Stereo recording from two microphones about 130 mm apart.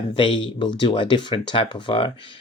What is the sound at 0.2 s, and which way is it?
Speech, 40° left (ahead or behind).